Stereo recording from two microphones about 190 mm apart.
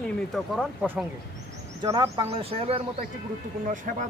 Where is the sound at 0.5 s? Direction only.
Centre (ahead or behind).